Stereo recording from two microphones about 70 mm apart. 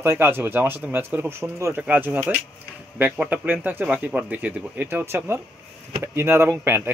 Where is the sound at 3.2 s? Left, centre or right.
Right.